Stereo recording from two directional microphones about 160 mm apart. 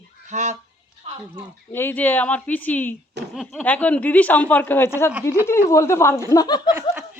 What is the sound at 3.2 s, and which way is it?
Speech, 90° right.